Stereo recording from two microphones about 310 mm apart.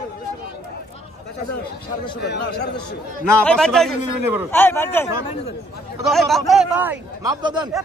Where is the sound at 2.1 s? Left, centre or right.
Left.